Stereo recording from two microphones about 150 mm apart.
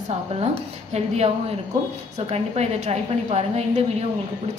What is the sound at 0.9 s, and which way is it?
A woman's voice, 45° right (ahead or behind).